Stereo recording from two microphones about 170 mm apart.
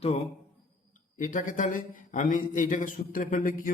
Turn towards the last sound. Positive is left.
turn(degrees=55)  # may be behind; listen again after turning